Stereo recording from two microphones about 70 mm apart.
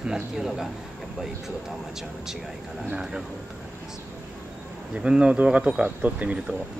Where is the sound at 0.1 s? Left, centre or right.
Centre.